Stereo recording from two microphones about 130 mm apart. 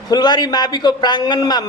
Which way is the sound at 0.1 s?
30° left (ahead or behind).